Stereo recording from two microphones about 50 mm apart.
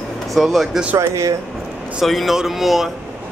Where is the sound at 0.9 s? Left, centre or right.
Right.